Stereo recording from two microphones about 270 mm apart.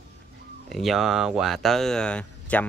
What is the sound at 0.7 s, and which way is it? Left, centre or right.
Speech, centre.